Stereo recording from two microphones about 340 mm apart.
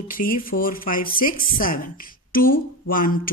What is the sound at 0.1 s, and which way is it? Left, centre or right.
Speech, left.